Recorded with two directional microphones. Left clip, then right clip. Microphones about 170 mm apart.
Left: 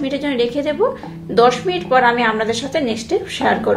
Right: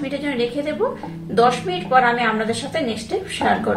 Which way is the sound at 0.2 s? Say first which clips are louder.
Left 4 dB; 40° left (ahead or behind).